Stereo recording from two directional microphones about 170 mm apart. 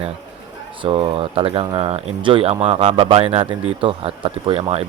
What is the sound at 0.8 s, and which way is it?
Speech, 30° right (ahead or behind).